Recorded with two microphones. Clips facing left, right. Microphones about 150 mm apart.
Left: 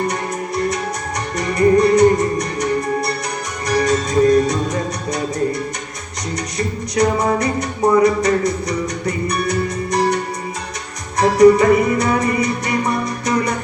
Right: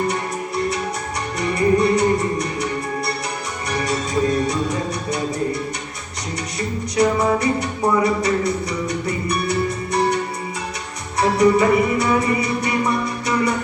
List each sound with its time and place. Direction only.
0.1 s music: 40° left (ahead or behind)
6.9 s music: 40° left (ahead or behind)
8.0 s speech: 40° left (ahead or behind)
9.0 s music: 40° left (ahead or behind)
11.2 s music: 40° left (ahead or behind)